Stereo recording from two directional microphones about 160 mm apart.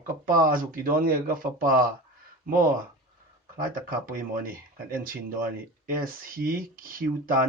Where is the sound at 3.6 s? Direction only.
60° right (ahead or behind).